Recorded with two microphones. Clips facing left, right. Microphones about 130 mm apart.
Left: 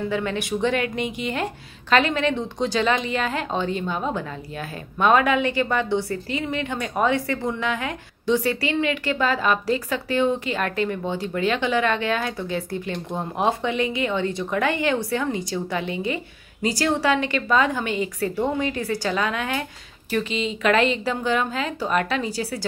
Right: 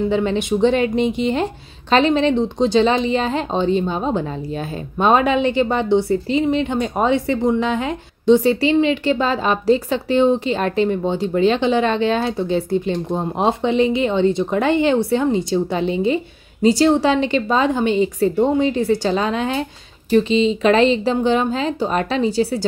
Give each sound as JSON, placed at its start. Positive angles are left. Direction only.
{"t": 0.1, "sound": "a woman's voice", "side_deg": -25}